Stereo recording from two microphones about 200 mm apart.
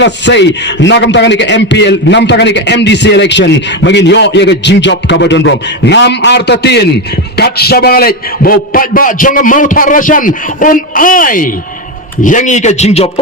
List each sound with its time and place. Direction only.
0.0 s a man's voice: 60° left (ahead or behind); by 13.1 s 35° left (ahead or behind)